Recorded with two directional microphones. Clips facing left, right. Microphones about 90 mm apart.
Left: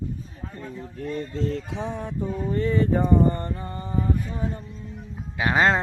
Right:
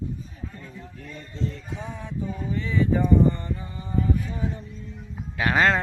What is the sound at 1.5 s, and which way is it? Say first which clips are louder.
Music: left 6 dB; 90° left.